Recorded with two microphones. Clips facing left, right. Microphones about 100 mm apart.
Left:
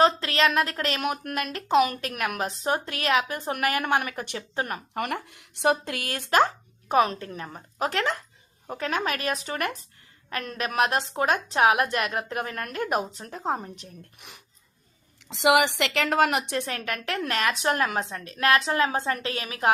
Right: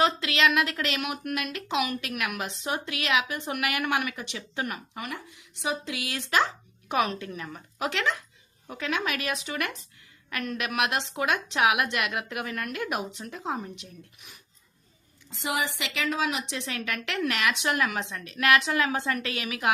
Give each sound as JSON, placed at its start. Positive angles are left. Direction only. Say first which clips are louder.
{"t": 0.0, "sound": "speech", "louder": "left 3 dB", "side_deg": 40}
{"t": 4.9, "sound": "speech", "louder": "left 7 dB", "side_deg": 65}
{"t": 15.3, "sound": "speech", "louder": "left 9 dB", "side_deg": 90}